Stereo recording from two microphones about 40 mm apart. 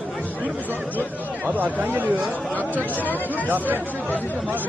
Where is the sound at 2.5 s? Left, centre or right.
Left.